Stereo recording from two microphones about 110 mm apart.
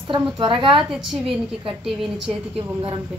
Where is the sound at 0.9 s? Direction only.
5° right (ahead or behind).